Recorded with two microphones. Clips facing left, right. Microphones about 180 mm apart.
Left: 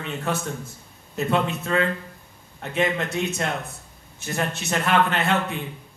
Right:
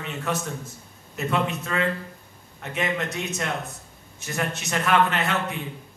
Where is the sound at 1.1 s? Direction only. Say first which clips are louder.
Left 2 dB; 30° left (ahead or behind).